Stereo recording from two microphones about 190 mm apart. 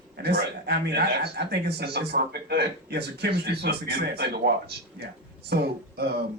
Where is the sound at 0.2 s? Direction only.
60° right (ahead or behind).